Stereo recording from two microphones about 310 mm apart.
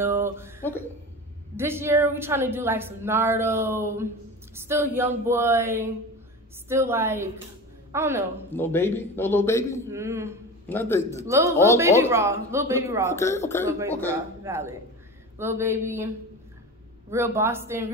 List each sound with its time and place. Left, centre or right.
0.0 s a sound: centre
0.6 s speech: centre
1.6 s a woman's voice: centre
8.5 s a man's voice: centre
9.8 s a woman's voice: centre
10.7 s a man's voice: centre
11.1 s a woman's voice: centre
13.1 s a man's voice: centre
13.7 s a woman's voice: centre
17.1 s a woman's voice: centre